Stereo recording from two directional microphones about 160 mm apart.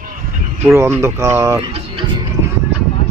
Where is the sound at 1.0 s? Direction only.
20° right (ahead or behind).